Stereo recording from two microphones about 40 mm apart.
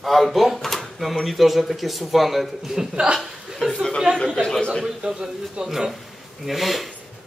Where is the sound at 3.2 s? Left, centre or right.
Centre.